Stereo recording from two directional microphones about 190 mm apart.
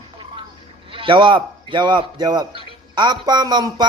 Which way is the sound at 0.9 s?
25° right (ahead or behind).